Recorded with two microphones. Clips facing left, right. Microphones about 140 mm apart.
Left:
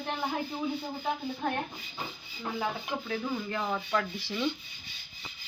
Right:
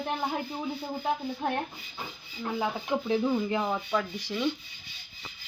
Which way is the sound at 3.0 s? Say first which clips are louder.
Right 9 dB; 25° right (ahead or behind).